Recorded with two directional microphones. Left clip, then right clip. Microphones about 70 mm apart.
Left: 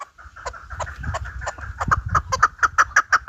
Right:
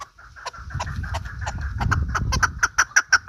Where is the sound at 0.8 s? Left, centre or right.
Left.